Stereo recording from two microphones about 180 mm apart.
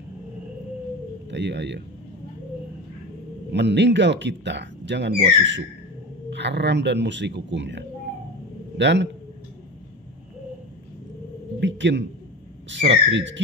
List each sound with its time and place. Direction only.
1.3 s speech: 75° right (ahead or behind)
3.5 s speech: 75° right (ahead or behind)
5.4 s speech: 90° right
6.3 s a man's voice: 75° right (ahead or behind)
11.6 s a sound: 85° right
12.6 s speech: 85° right